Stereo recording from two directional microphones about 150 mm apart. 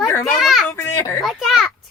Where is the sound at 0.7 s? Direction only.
15° left (ahead or behind).